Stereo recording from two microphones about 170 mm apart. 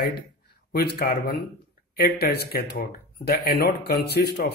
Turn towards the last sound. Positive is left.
turn(degrees=75)  # may be behind; listen again after turning